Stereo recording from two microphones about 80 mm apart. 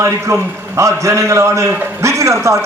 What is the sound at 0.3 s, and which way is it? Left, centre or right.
A man's voice, right.